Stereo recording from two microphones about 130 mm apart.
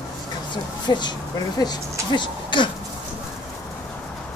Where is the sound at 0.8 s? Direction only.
35° left (ahead or behind).